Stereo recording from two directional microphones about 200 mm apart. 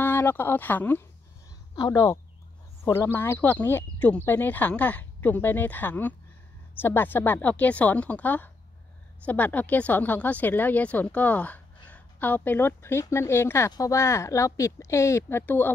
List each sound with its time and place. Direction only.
0.0 s speech: 10° left (ahead or behind)